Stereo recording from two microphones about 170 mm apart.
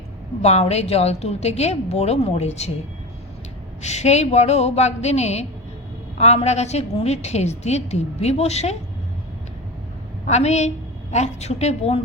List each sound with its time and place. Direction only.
0.4 s a woman's voice: 40° left (ahead or behind)
3.8 s a woman's voice: 40° left (ahead or behind)
10.2 s a woman's voice: 40° left (ahead or behind)